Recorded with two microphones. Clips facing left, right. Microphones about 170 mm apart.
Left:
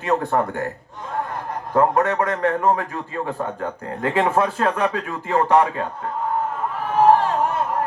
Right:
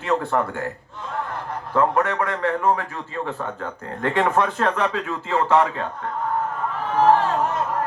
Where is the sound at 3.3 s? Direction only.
40° left (ahead or behind).